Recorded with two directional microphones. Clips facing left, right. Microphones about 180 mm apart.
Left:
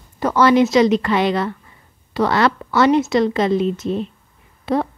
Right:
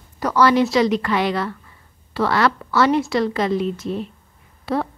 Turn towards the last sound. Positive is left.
turn(degrees=20)  # may be behind; listen again after turning